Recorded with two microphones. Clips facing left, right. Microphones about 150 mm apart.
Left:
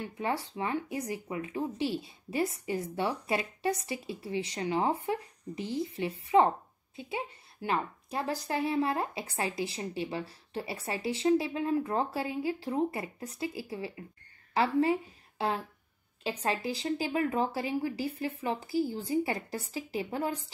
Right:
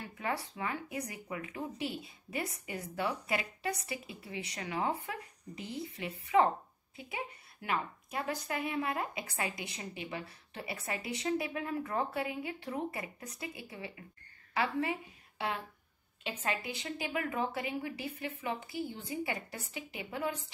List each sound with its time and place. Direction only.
0.0 s a woman's voice: 25° left (ahead or behind)